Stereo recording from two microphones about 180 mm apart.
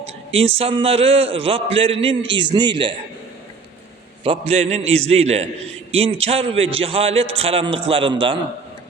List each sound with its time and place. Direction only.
0.3 s a man's voice: 35° right (ahead or behind)
4.2 s a man's voice: 35° right (ahead or behind)